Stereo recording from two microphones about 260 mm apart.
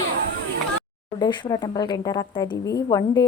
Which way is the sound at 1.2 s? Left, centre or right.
Centre.